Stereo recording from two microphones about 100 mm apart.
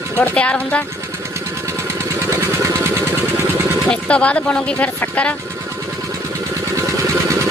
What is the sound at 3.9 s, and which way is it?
Speech, 10° left (ahead or behind).